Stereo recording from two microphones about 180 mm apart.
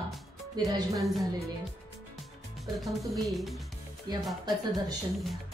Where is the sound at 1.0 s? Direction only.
Centre (ahead or behind).